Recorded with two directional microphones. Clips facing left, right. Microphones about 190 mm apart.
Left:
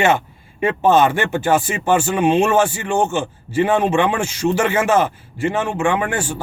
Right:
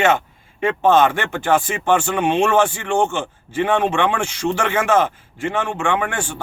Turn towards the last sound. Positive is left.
turn(degrees=5)  # may be behind; listen again after turning